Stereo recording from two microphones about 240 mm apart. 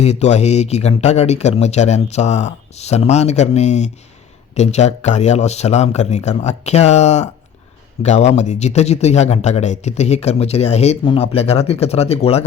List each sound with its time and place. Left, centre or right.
0.0 s speech: left